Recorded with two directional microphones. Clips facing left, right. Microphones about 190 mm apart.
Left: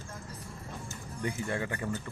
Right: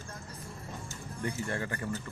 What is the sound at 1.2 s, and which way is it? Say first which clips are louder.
Speech: left 1 dB; 15° left (ahead or behind).